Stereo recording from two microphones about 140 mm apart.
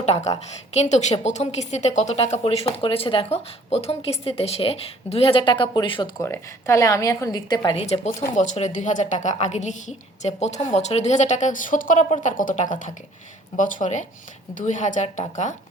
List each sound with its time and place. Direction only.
0.0 s speech: 50° left (ahead or behind)
2.2 s speech: 45° left (ahead or behind)
6.1 s a woman's voice: 20° left (ahead or behind)
7.8 s speech: 45° left (ahead or behind)